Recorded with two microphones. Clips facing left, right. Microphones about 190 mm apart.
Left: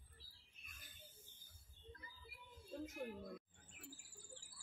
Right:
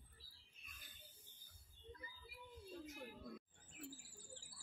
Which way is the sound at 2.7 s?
50° left (ahead or behind).